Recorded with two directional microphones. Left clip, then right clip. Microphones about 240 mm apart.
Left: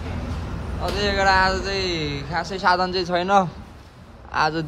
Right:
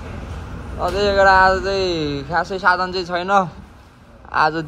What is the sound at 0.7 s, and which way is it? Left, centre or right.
A man's voice, centre.